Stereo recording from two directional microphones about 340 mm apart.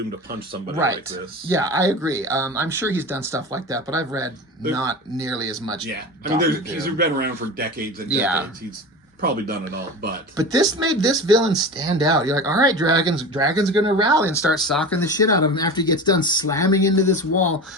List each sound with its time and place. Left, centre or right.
1.5 s speech: centre
6.4 s speech: right
8.0 s speech: centre
9.2 s speech: right
10.3 s speech: centre
14.4 s speech: centre